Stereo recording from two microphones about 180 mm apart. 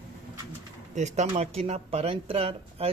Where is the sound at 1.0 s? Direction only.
40° right (ahead or behind).